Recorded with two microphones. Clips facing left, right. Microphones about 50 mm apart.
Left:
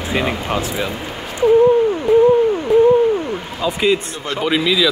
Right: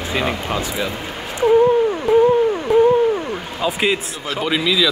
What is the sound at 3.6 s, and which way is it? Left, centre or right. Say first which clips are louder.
Speech: left 2 dB; centre.